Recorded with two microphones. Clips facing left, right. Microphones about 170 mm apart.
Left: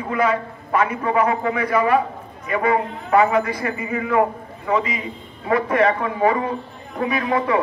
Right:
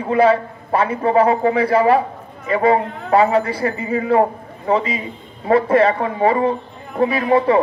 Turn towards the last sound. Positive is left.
turn(degrees=-30)  # may be behind; listen again after turning